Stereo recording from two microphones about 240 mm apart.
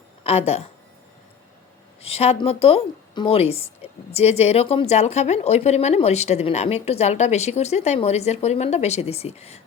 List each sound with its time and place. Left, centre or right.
0.3 s a woman's voice: left
2.0 s a woman's voice: left